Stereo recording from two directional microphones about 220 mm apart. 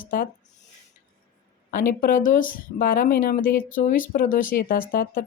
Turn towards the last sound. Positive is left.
turn(degrees=40)  # may be behind; listen again after turning